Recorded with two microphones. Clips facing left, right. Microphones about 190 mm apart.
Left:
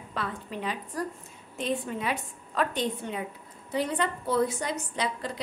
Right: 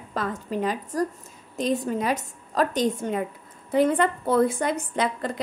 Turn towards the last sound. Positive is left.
turn(degrees=-50)  # may be behind; listen again after turning